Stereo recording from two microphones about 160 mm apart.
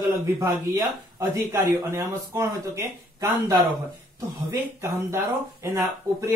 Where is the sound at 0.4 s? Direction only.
20° right (ahead or behind).